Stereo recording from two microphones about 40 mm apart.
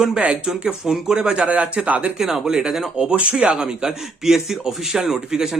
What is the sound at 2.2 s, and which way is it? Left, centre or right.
Speech, centre.